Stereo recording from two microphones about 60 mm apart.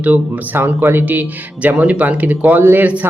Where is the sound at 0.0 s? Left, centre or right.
Right.